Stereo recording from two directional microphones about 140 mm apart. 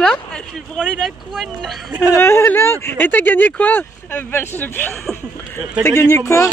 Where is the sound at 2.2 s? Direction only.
15° left (ahead or behind).